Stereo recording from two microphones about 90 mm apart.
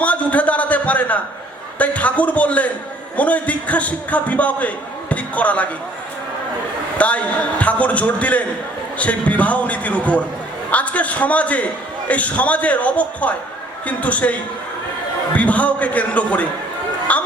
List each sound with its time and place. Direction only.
0.0 s a sound: 15° left (ahead or behind)
1.8 s a man's voice: 15° left (ahead or behind)
7.0 s a man's voice: 15° left (ahead or behind)
15.4 s a man's voice: 15° left (ahead or behind)